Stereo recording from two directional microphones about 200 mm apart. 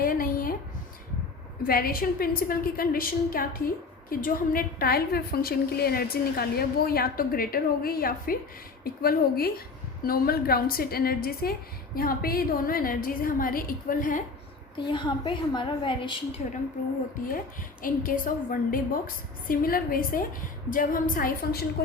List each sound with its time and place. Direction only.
0.0 s a sound: 45° left (ahead or behind)
1.6 s a woman's voice: 45° left (ahead or behind)
14.8 s a woman's voice: 25° left (ahead or behind)
16.4 s a woman's voice: 35° left (ahead or behind)
17.8 s a woman's voice: 45° left (ahead or behind)